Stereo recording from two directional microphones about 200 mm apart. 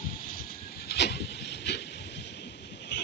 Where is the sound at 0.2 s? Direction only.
45° left (ahead or behind).